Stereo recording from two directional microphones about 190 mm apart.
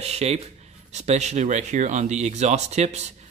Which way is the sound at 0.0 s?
35° right (ahead or behind).